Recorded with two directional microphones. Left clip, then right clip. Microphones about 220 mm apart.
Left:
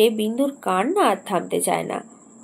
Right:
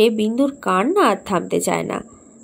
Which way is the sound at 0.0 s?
45° right (ahead or behind).